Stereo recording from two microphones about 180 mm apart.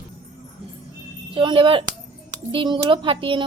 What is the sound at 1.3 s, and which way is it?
Speech, 30° right (ahead or behind).